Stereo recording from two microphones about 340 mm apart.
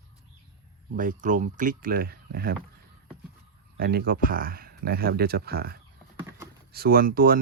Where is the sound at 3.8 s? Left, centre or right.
Right.